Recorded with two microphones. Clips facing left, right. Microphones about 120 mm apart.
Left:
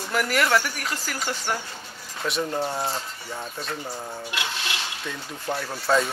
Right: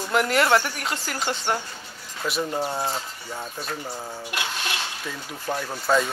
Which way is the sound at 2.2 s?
5° right (ahead or behind).